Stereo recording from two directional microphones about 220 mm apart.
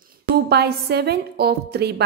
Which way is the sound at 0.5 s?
45° right (ahead or behind).